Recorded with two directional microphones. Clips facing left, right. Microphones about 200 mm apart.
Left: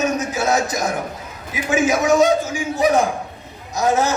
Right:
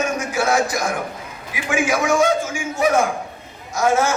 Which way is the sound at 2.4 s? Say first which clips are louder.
Left 2 dB; 35° left (ahead or behind).